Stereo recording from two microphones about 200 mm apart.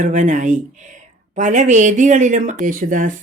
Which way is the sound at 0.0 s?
40° right (ahead or behind).